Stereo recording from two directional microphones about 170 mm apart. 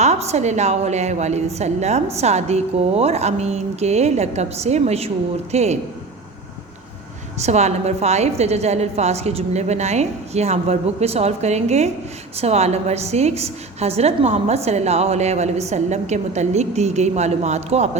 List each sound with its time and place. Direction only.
0.0 s a woman's voice: 40° right (ahead or behind)
7.4 s a woman's voice: 40° right (ahead or behind)